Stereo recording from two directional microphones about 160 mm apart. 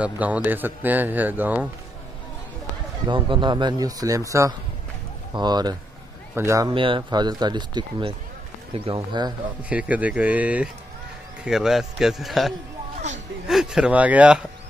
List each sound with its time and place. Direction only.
0.0 s a man's voice: 10° right (ahead or behind)
3.1 s speech: 30° right (ahead or behind)
6.7 s speech: 30° right (ahead or behind)
9.6 s a man's voice: 10° right (ahead or behind)